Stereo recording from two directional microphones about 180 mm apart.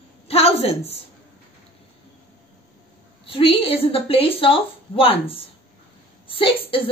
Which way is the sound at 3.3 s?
30° left (ahead or behind).